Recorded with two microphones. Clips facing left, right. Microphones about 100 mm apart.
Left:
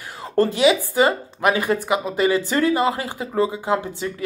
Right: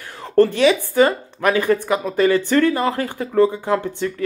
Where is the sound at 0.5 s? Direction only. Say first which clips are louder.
Right 1 dB; 15° left (ahead or behind).